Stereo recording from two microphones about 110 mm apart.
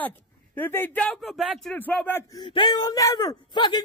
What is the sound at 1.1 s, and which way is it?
Speech, centre (ahead or behind).